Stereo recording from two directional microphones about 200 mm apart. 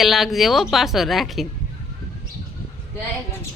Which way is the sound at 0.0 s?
Centre (ahead or behind).